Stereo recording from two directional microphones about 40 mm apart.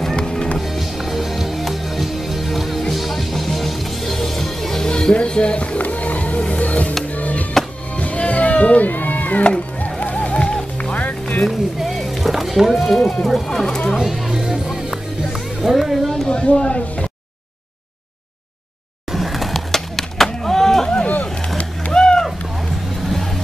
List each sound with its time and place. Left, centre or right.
0.2 s music: centre
0.6 s music: centre; by 5.8 s left
5.8 s music: left
11.4 s music: centre
12.8 s a sound: centre
13.2 s speech: centre
13.9 s music: centre
14.4 s music: centre
15.6 s a sound: centre
16.3 s a sound: left
19.1 s skateboard: centre
21.9 s a sound: centre
23.0 s vehicle: centre